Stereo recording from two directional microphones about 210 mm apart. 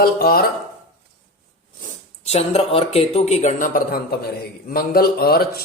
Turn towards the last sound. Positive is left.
turn(degrees=45)  # may be behind; listen again after turning